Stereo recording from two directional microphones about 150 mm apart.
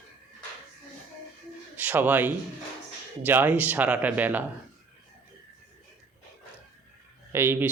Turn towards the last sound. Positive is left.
turn(degrees=-15)  # may be behind; listen again after turning